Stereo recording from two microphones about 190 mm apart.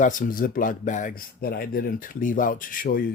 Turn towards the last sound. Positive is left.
turn(degrees=50)  # may be behind; listen again after turning